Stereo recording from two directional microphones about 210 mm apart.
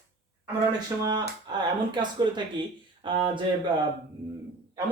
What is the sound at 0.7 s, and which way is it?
Speech, 20° right (ahead or behind).